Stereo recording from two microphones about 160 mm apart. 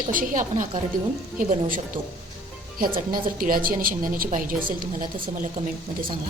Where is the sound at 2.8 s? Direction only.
60° right (ahead or behind).